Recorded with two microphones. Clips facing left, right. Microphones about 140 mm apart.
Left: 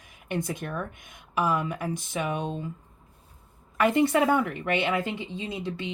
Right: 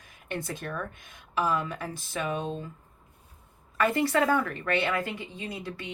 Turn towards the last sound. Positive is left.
turn(degrees=20)  # may be behind; listen again after turning